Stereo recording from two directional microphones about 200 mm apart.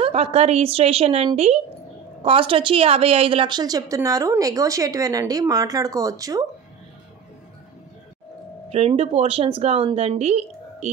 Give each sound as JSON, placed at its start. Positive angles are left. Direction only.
{"t": 0.0, "sound": "a woman's voice", "side_deg": -30}
{"t": 8.6, "sound": "speech", "side_deg": -30}